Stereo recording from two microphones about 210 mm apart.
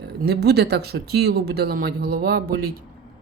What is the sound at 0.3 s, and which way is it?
Speech, 50° right (ahead or behind).